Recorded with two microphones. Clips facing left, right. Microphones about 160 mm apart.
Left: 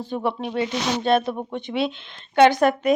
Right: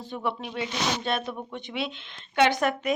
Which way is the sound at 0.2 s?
40° left (ahead or behind).